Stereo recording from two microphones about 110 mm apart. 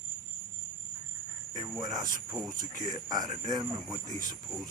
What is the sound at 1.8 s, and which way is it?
Speech, 35° right (ahead or behind).